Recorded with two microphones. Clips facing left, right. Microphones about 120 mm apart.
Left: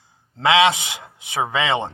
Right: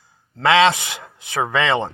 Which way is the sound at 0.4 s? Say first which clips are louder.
Right 1 dB; 15° left (ahead or behind).